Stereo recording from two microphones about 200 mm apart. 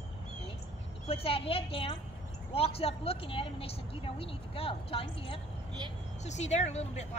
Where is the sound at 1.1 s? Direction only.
30° left (ahead or behind).